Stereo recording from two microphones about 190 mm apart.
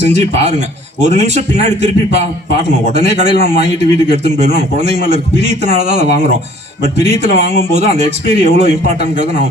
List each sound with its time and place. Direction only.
0.0 s a man's voice: 35° right (ahead or behind)
5.0 s a man's voice: 35° right (ahead or behind)